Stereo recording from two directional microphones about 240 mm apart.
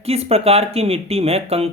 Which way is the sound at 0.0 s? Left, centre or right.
Right.